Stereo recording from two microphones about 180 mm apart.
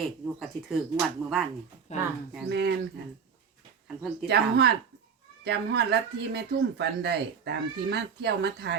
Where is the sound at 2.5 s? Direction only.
70° right (ahead or behind).